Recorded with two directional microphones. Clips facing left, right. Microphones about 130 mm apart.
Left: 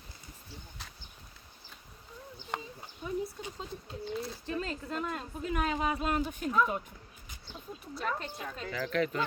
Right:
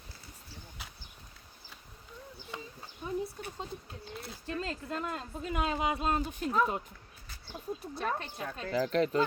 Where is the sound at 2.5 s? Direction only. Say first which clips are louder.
Left 5 dB; 60° left (ahead or behind).